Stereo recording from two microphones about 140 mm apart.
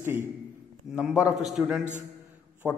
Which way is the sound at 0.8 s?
5° right (ahead or behind).